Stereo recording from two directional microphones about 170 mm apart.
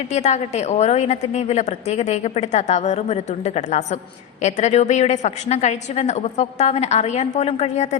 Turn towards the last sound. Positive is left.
turn(degrees=40)  # may be behind; listen again after turning